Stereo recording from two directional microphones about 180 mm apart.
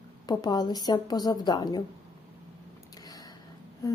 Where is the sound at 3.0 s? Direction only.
20° left (ahead or behind).